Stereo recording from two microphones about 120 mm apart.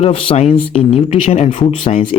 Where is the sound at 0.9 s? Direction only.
60° left (ahead or behind).